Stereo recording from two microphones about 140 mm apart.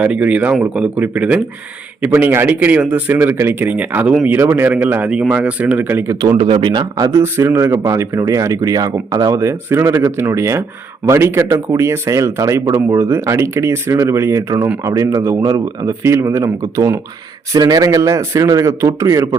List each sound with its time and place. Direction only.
0.0 s speech: 10° right (ahead or behind)
4.3 s speech: 15° right (ahead or behind)
6.2 s speech: 35° right (ahead or behind)